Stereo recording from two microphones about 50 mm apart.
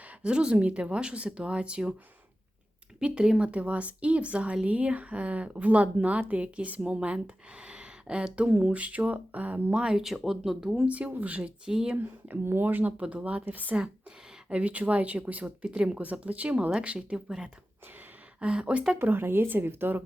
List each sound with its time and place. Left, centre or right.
0.2 s a woman's voice: centre
3.0 s a woman's voice: centre; by 9.8 s right
10.2 s speech: centre
10.8 s a woman's voice: right
12.5 s speech: right
13.0 s a woman's voice: right
15.6 s a woman's voice: right
17.2 s speech: centre
18.3 s a woman's voice: right
18.9 s speech: right